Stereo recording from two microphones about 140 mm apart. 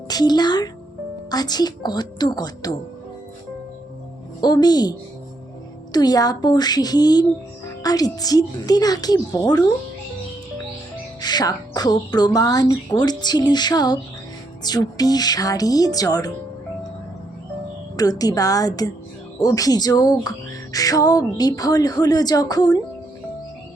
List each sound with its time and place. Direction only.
0.1 s a woman's voice: 30° left (ahead or behind)
4.4 s a woman's voice: 30° left (ahead or behind)
11.2 s a woman's voice: 30° left (ahead or behind)
17.9 s a woman's voice: 25° left (ahead or behind)